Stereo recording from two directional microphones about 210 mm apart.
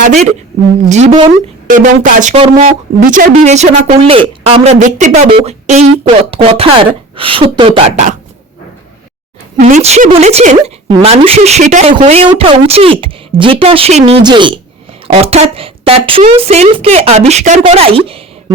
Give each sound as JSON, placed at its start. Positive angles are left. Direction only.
{"t": 0.0, "sound": "a woman's voice", "side_deg": -35}
{"t": 9.6, "sound": "a woman's voice", "side_deg": -35}